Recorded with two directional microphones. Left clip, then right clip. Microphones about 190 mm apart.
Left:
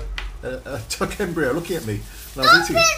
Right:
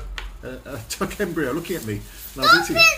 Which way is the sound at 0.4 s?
10° right (ahead or behind).